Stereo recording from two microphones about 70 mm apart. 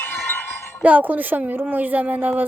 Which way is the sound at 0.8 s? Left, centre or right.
Right.